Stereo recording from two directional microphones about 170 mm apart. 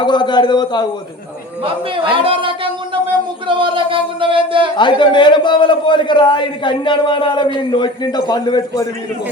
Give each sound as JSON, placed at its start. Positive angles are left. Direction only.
{"t": 0.0, "sound": "a man's voice", "side_deg": 25}
{"t": 1.6, "sound": "speech", "side_deg": -30}
{"t": 4.8, "sound": "a man's voice", "side_deg": 30}